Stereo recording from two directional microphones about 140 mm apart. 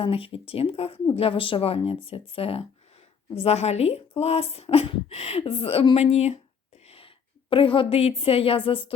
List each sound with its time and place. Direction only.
0.0 s a woman's voice: 40° left (ahead or behind)
6.8 s a sound: 45° left (ahead or behind)
7.5 s a woman's voice: 40° left (ahead or behind)